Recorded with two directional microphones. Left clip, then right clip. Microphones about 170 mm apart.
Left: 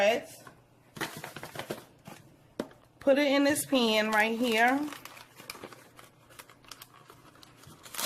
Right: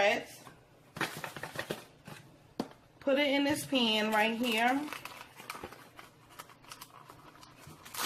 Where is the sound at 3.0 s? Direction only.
65° left (ahead or behind).